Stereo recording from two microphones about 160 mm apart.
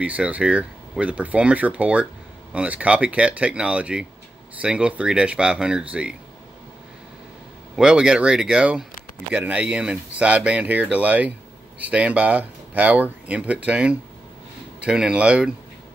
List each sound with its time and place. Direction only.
0.0 s speech: 10° right (ahead or behind)
7.7 s speech: 5° right (ahead or behind)